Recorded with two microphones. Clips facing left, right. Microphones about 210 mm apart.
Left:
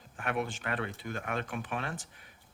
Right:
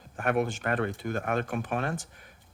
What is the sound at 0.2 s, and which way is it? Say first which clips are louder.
Speech: right 7 dB; 45° right (ahead or behind).